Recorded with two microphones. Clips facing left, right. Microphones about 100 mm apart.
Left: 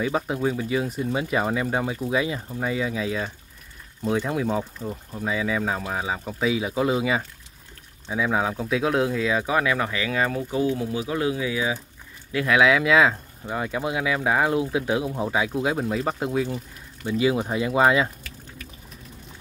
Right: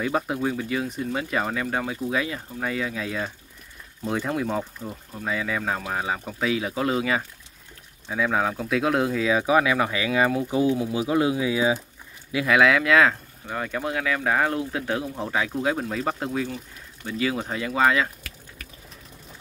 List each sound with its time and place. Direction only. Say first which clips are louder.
0.0 s speech: left 1 dB; 5° left (ahead or behind); by 11.8 s 20° right (ahead or behind)
12.4 s speech: even; centre (ahead or behind)
16.4 s speech: left 3 dB; 15° left (ahead or behind)